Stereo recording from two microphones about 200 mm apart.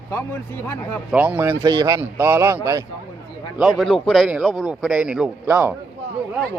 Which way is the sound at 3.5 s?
Centre (ahead or behind).